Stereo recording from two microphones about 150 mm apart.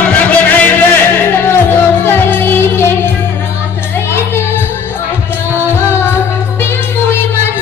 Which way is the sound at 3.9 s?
15° left (ahead or behind).